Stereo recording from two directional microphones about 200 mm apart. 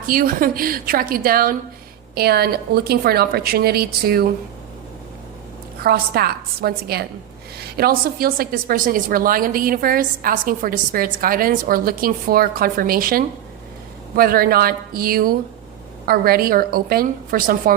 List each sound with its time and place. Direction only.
0.0 s a woman's voice: 45° right (ahead or behind)
5.8 s a woman's voice: 50° right (ahead or behind)